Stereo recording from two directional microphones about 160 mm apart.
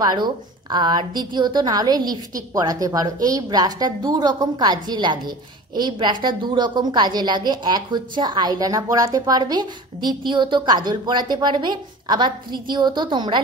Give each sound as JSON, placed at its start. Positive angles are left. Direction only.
{"t": 0.0, "sound": "a woman's voice", "side_deg": -25}